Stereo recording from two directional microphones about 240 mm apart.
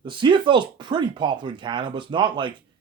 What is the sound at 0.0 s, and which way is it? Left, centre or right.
Speech, centre.